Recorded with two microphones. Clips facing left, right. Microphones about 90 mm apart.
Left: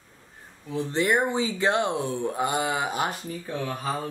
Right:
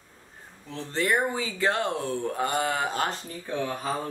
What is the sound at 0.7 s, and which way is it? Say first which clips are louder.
Speech: left 3 dB; 15° left (ahead or behind).